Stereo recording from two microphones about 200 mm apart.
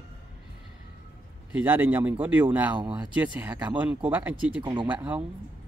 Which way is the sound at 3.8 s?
5° right (ahead or behind).